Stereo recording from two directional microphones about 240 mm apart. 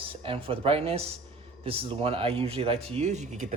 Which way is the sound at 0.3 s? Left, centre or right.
Right.